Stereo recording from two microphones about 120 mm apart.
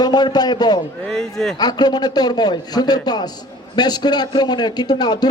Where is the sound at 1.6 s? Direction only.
35° left (ahead or behind).